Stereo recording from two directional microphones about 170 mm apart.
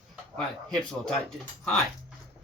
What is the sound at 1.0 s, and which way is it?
Speech, 5° left (ahead or behind).